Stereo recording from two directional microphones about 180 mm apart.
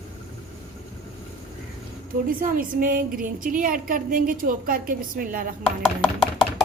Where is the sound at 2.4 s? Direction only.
50° right (ahead or behind).